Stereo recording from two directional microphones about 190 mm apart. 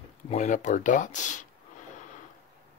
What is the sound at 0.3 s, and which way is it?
Speech, 40° left (ahead or behind).